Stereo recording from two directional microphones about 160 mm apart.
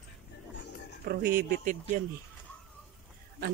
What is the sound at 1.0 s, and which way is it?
Speech, 65° right (ahead or behind).